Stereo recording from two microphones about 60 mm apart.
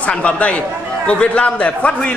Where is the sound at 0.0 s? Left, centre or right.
Centre.